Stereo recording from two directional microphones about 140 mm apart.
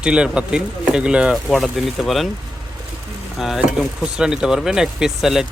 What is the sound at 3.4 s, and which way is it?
Speech, centre (ahead or behind).